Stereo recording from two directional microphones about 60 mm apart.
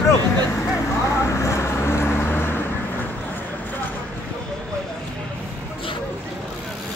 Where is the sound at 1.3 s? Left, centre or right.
Left.